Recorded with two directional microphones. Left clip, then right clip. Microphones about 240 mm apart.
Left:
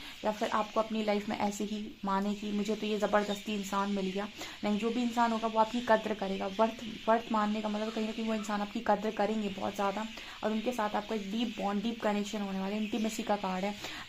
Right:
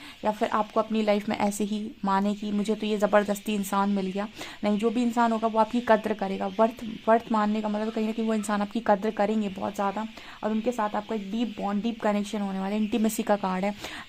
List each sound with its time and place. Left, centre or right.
0.3 s speech: right